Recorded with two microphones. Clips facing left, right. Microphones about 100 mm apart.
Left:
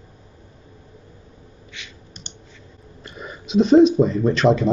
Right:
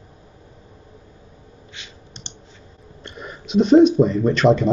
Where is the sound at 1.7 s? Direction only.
30° right (ahead or behind).